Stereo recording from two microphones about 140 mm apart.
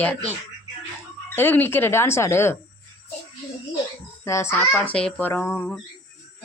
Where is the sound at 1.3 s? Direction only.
15° left (ahead or behind).